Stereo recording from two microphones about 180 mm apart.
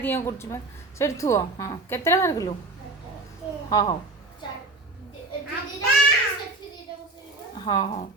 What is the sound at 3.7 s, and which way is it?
Speech, 20° left (ahead or behind).